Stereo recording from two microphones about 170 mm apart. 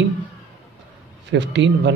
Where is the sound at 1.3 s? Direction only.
90° right.